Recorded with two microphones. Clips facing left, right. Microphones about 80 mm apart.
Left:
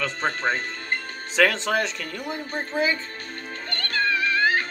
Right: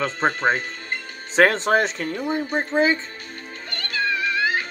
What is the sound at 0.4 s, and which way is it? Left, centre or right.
Speech, centre.